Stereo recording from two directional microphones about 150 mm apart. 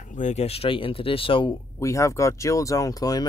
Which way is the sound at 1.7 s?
20° left (ahead or behind).